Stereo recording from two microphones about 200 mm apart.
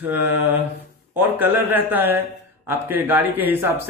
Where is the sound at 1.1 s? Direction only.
10° right (ahead or behind).